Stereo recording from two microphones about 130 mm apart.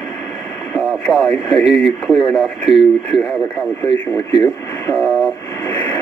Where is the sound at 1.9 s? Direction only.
5° right (ahead or behind).